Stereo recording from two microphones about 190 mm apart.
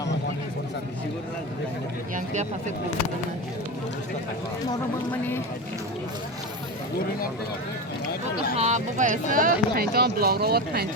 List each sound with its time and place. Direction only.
2.1 s speech: 40° right (ahead or behind)
8.5 s speech: 35° right (ahead or behind); by 10.8 s 55° right (ahead or behind)